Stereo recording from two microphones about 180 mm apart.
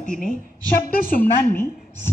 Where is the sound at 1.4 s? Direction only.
15° left (ahead or behind).